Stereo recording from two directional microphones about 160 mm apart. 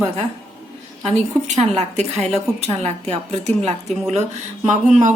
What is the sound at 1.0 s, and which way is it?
A woman's voice, 45° right (ahead or behind).